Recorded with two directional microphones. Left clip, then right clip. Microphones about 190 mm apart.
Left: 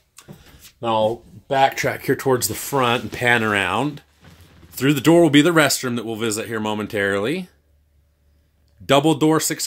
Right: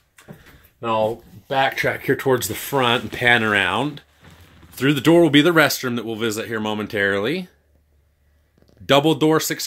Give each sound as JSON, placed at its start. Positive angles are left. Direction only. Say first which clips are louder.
{"t": 0.7, "sound": "speech", "louder": "left 1 dB", "side_deg": 25}
{"t": 8.8, "sound": "speech", "louder": "even", "side_deg": 10}